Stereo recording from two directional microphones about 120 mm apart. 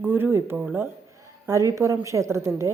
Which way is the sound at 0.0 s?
15° right (ahead or behind).